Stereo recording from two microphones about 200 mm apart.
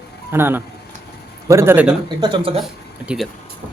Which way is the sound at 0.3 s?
10° right (ahead or behind).